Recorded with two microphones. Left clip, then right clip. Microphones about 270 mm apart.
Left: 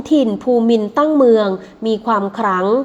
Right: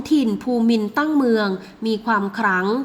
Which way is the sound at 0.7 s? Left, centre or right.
Centre.